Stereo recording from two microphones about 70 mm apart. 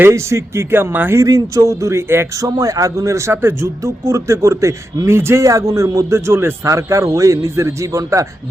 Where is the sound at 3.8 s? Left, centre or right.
Right.